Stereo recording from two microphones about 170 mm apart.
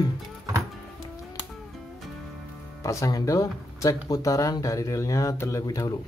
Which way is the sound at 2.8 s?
20° left (ahead or behind).